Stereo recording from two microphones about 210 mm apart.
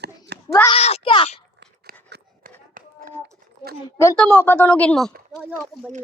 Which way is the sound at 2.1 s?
40° right (ahead or behind).